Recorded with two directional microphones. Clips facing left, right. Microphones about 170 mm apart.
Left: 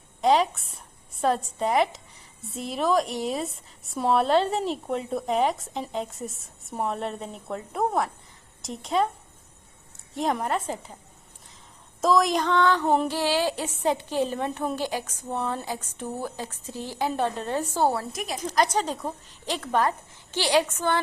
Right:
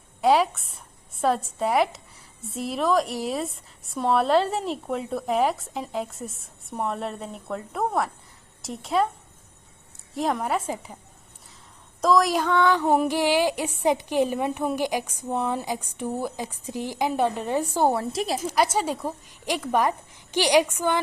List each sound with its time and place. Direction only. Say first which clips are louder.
0.2 s a woman's voice: right 1 dB; 5° right (ahead or behind)
10.2 s a woman's voice: right 1 dB; centre (ahead or behind)
11.9 s music: right 1 dB; centre (ahead or behind); by 18.0 s 15° right (ahead or behind)
18.1 s a woman's voice: right 6 dB; 30° right (ahead or behind)
18.4 s music: left 1 dB; 10° right (ahead or behind)